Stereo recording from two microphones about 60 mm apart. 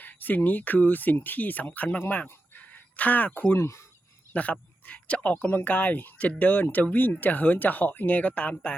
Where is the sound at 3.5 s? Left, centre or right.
Left.